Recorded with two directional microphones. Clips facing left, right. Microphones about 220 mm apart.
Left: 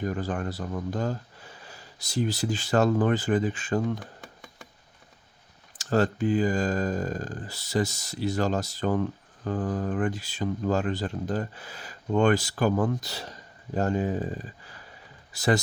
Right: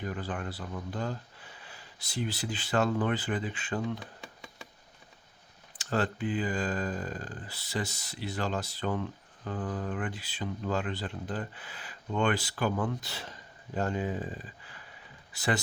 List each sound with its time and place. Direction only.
0.0 s speech: 45° left (ahead or behind)
4.0 s a sound: centre (ahead or behind)
5.7 s speech: 40° left (ahead or behind)